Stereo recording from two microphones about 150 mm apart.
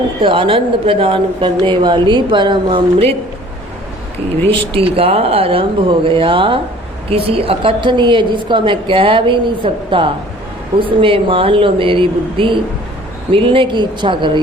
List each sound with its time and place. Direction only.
0.2 s speech: 35° right (ahead or behind)
4.7 s speech: 40° right (ahead or behind)